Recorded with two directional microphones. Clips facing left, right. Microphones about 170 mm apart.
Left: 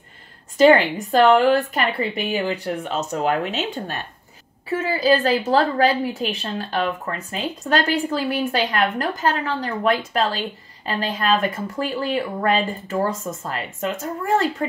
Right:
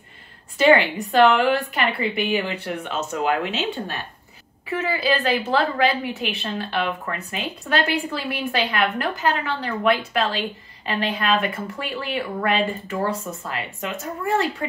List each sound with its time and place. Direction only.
0.6 s a woman's voice: 40° left (ahead or behind)
4.6 s a woman's voice: 35° left (ahead or behind)